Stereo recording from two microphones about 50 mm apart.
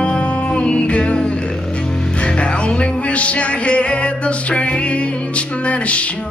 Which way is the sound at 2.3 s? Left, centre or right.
Left.